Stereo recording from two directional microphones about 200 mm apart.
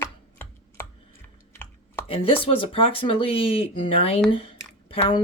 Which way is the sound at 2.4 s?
25° left (ahead or behind).